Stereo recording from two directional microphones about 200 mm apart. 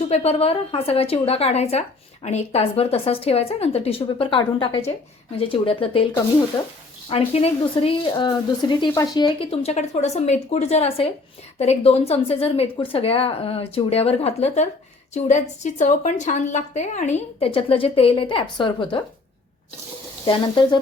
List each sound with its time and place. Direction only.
0.1 s speech: 30° left (ahead or behind)
7.1 s a woman's voice: 30° left (ahead or behind)
20.2 s speech: 25° left (ahead or behind)